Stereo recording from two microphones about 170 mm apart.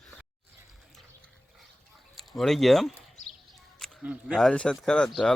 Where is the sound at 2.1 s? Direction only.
Centre (ahead or behind).